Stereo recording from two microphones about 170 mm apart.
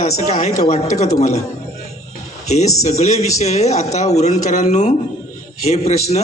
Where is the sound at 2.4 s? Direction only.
40° left (ahead or behind).